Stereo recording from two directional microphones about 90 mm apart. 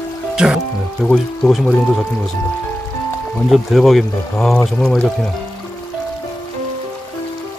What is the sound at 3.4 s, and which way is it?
Speech, centre (ahead or behind).